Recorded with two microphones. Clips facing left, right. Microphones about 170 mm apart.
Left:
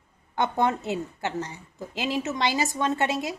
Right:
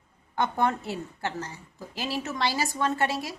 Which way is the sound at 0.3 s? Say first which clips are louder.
Left 2 dB; 20° left (ahead or behind).